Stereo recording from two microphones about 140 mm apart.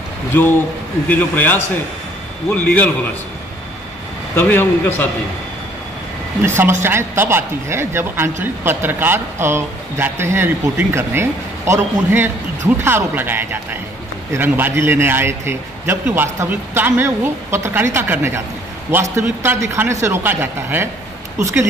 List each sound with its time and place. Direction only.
1.0 s a man's voice: 10° left (ahead or behind)
4.4 s a man's voice: 15° left (ahead or behind)
6.4 s speech: 20° right (ahead or behind)